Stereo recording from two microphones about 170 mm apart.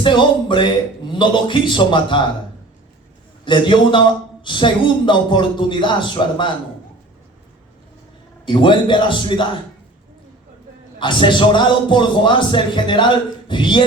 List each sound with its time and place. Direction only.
0.0 s a man's voice: 30° left (ahead or behind)
3.4 s a man's voice: 30° left (ahead or behind)
8.4 s a man's voice: 30° left (ahead or behind)
11.0 s a man's voice: 30° left (ahead or behind)